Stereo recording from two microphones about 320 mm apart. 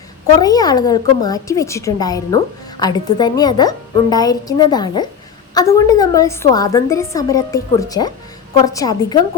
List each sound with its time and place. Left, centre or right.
0.3 s a woman's voice: centre